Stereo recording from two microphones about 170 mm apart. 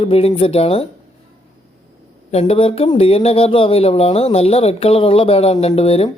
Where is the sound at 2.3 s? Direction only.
35° left (ahead or behind).